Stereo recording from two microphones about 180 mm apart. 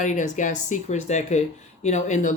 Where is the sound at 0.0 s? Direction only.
45° left (ahead or behind).